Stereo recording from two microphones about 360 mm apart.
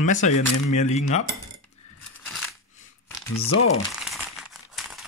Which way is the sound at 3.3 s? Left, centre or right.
Left.